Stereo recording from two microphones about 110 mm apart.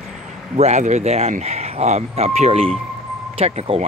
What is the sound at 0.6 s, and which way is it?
Speech, 90° right.